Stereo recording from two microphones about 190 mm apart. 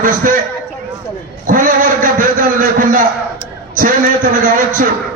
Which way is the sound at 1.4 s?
45° right (ahead or behind).